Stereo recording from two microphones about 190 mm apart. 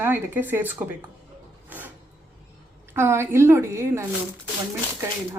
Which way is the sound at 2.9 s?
10° right (ahead or behind).